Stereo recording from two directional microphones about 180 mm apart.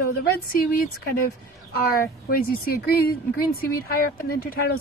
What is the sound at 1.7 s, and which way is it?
A woman's voice, 55° left (ahead or behind).